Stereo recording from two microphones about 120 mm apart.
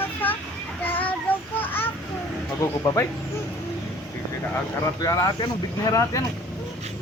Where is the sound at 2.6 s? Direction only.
25° left (ahead or behind).